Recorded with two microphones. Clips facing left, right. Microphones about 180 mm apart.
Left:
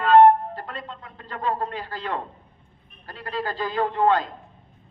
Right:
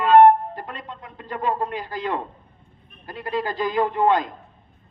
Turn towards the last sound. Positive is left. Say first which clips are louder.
# right 1 dB
turn(degrees=-15)  # may be behind; listen again after turning